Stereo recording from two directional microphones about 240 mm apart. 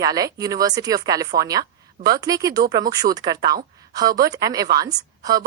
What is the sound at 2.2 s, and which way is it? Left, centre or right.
A woman's voice, centre.